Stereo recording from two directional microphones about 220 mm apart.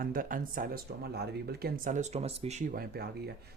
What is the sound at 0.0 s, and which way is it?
Speech, 40° right (ahead or behind).